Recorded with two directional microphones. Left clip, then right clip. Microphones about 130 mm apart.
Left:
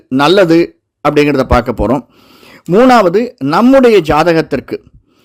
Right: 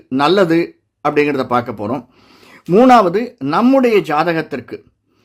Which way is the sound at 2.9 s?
35° left (ahead or behind).